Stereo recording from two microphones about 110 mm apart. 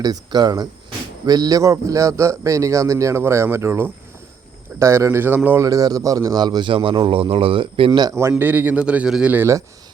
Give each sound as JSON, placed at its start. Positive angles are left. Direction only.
{"t": 0.0, "sound": "speech", "side_deg": -35}
{"t": 5.6, "sound": "a man's voice", "side_deg": -35}
{"t": 8.3, "sound": "a man's voice", "side_deg": -15}
{"t": 9.3, "sound": "speech", "side_deg": -25}